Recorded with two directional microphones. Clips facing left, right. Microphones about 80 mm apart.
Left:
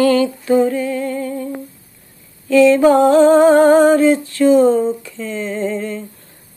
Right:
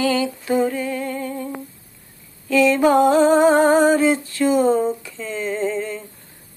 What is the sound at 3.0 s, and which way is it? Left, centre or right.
Humming, right.